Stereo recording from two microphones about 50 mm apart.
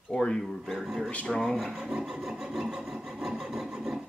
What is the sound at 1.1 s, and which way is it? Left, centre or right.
Speech, left.